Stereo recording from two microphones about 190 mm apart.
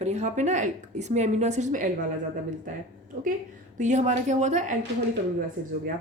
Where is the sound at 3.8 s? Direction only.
40° right (ahead or behind).